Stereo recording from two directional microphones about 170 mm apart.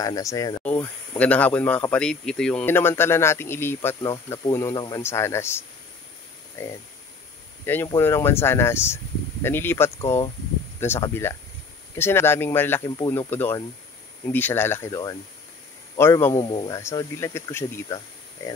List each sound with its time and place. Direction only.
0.0 s speech: 20° left (ahead or behind)
0.7 s speech: 10° left (ahead or behind)
7.6 s speech: 15° left (ahead or behind)
13.3 s speech: 15° left (ahead or behind)
16.3 s speech: 25° left (ahead or behind)